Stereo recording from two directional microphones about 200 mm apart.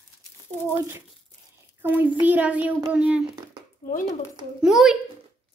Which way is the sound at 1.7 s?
10° right (ahead or behind).